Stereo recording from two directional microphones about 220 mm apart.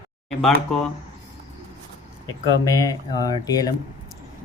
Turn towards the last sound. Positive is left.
turn(degrees=15)  # may be behind; listen again after turning